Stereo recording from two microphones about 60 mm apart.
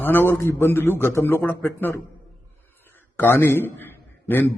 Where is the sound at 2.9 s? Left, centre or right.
Left.